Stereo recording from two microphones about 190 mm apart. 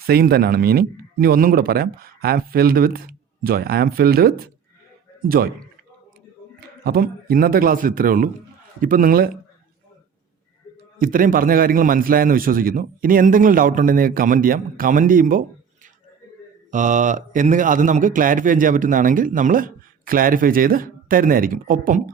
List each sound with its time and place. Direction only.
0.1 s a man's voice: 55° right (ahead or behind)
6.8 s a man's voice: 50° right (ahead or behind)
10.9 s a man's voice: 45° right (ahead or behind)